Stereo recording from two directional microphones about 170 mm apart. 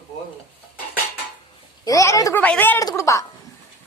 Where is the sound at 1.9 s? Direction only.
20° left (ahead or behind).